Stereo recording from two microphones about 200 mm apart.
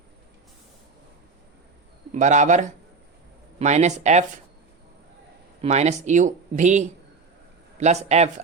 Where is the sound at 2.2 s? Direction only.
40° right (ahead or behind).